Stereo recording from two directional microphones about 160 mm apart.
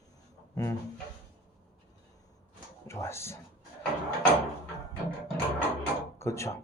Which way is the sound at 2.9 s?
15° left (ahead or behind).